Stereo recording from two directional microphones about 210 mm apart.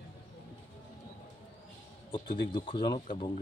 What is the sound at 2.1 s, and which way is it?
Speech, 20° left (ahead or behind).